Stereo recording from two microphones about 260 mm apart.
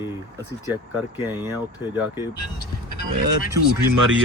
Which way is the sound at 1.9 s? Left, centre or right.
Centre.